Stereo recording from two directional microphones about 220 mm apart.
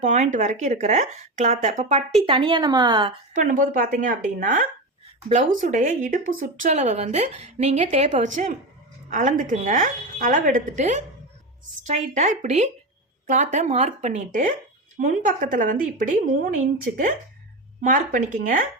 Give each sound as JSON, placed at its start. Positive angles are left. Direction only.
{"t": 0.0, "sound": "speech", "side_deg": -35}
{"t": 3.4, "sound": "a woman's voice", "side_deg": -35}